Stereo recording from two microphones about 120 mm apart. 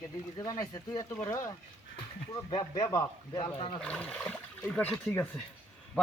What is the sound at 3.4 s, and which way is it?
Speech, 50° left (ahead or behind).